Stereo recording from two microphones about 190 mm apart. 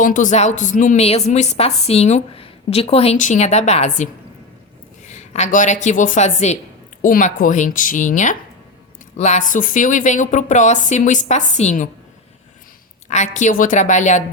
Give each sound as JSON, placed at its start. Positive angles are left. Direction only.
{"t": 0.0, "sound": "a woman's voice", "side_deg": 45}
{"t": 13.1, "sound": "a woman's voice", "side_deg": 35}